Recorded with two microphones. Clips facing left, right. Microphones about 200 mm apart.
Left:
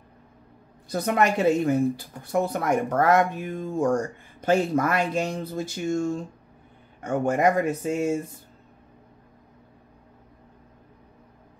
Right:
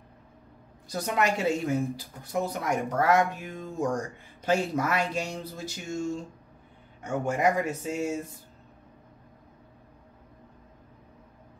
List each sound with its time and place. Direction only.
0.8 s speech: 55° left (ahead or behind)